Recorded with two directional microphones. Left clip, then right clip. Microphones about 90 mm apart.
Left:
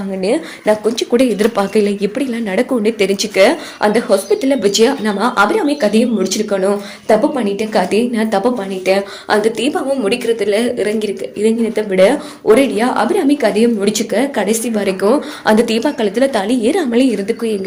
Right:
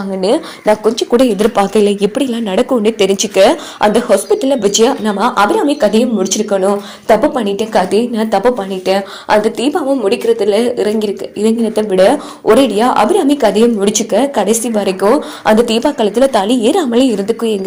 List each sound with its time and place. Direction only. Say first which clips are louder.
0.3 s a woman's voice: right 3 dB; 40° right (ahead or behind)
1.1 s a woman's voice: right 2 dB; 40° right (ahead or behind)
1.7 s a woman's voice: right 3 dB; 55° right (ahead or behind)
4.3 s a woman's voice: right 2 dB; 25° right (ahead or behind)
11.7 s a woman's voice: right 3 dB; 40° right (ahead or behind)
13.7 s a woman's voice: right 3 dB; 35° right (ahead or behind)